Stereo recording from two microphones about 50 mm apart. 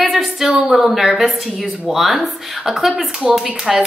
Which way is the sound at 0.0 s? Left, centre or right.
Centre.